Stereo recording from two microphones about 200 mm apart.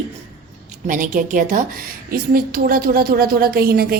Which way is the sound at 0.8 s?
40° right (ahead or behind).